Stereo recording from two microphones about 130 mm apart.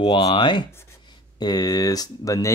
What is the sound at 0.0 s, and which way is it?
Speech, 40° left (ahead or behind).